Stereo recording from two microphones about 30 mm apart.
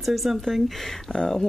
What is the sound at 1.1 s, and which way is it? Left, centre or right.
Speech, left.